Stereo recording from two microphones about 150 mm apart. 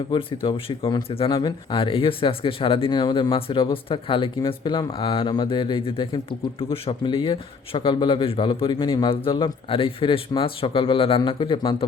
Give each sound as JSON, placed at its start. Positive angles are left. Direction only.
{"t": 0.1, "sound": "speech", "side_deg": 35}